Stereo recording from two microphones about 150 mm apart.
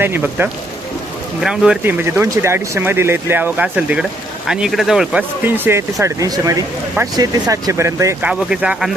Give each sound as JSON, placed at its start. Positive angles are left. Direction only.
{"t": 0.0, "sound": "speech", "side_deg": -15}
{"t": 5.5, "sound": "speech", "side_deg": -15}
{"t": 8.2, "sound": "speech", "side_deg": -5}